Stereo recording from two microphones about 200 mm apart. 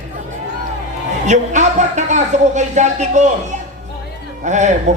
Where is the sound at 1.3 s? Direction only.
35° right (ahead or behind).